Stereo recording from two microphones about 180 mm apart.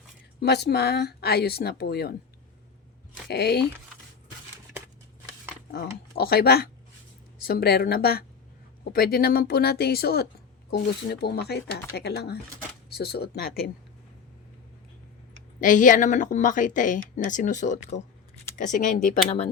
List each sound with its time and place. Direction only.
0.3 s speech: 65° left (ahead or behind)
3.2 s speech: 65° left (ahead or behind)
5.7 s speech: 60° left (ahead or behind)
15.6 s a woman's voice: 45° left (ahead or behind)